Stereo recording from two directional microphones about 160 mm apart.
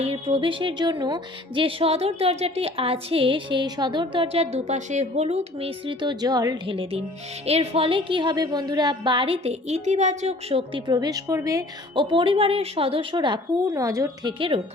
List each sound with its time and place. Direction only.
0.0 s speech: 35° right (ahead or behind); by 12.0 s 20° right (ahead or behind)
12.1 s speech: 35° right (ahead or behind)
14.3 s speech: 35° right (ahead or behind)